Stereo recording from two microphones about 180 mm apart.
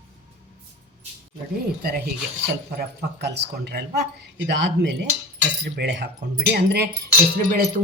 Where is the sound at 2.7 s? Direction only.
60° right (ahead or behind).